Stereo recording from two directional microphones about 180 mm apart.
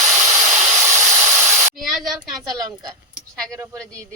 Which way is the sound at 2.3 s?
20° right (ahead or behind).